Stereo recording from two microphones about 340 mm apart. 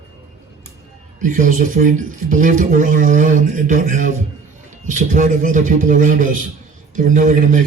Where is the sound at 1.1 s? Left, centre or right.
Right.